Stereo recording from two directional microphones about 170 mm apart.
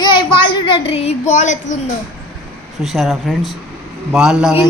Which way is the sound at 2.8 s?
Centre (ahead or behind).